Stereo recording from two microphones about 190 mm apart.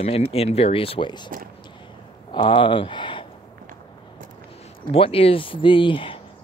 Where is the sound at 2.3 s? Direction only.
25° left (ahead or behind).